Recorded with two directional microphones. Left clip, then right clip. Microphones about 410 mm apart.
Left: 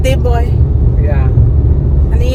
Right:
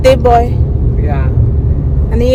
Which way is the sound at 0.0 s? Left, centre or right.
Right.